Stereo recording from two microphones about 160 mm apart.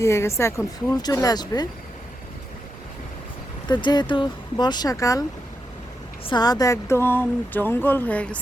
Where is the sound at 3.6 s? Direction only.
25° left (ahead or behind).